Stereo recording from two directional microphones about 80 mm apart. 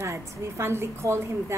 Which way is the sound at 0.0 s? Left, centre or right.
Right.